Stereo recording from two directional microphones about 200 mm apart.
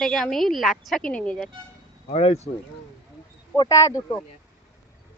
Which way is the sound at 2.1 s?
30° left (ahead or behind).